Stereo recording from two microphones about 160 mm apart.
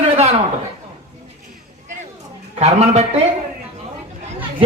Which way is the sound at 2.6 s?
45° right (ahead or behind).